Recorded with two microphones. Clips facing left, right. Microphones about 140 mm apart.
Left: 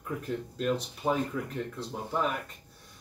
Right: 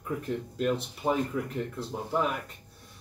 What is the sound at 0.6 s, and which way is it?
Speech, 10° right (ahead or behind).